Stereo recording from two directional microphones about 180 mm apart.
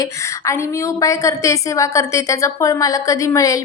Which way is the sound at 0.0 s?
15° left (ahead or behind).